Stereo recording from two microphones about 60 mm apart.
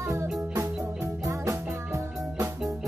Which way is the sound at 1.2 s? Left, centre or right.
Right.